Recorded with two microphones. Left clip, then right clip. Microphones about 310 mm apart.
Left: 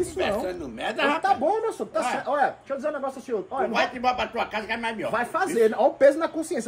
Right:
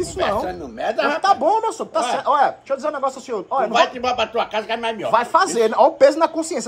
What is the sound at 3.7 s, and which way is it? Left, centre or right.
Speech, centre.